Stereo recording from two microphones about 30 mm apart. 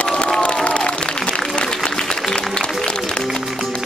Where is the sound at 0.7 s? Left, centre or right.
Left.